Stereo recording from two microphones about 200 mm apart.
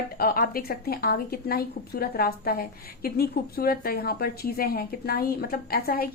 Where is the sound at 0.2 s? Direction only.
50° left (ahead or behind).